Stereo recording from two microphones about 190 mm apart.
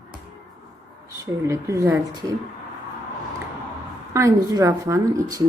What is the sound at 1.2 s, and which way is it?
Speech, 15° right (ahead or behind).